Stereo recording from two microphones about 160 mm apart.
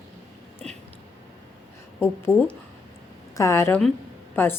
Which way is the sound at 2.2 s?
10° left (ahead or behind).